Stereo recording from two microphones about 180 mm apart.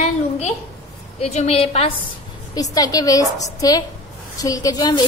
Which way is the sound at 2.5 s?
20° left (ahead or behind).